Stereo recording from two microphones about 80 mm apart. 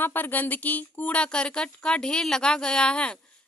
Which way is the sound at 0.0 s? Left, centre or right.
Left.